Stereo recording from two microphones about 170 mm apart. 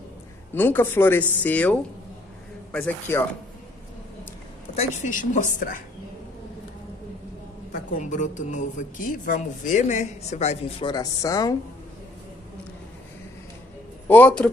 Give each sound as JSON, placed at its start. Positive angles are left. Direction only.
{"t": 0.6, "sound": "a man's voice", "side_deg": 10}
{"t": 4.7, "sound": "a man's voice", "side_deg": 50}
{"t": 7.7, "sound": "a man's voice", "side_deg": 50}
{"t": 10.9, "sound": "a woman's voice", "side_deg": 20}
{"t": 14.0, "sound": "speech", "side_deg": 10}